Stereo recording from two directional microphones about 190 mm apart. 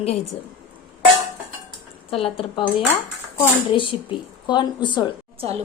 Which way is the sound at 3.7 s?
25° left (ahead or behind).